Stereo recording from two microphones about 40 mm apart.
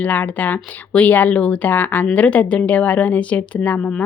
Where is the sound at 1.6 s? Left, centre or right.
Left.